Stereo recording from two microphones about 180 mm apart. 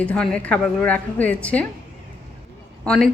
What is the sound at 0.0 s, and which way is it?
A woman's voice, 5° left (ahead or behind).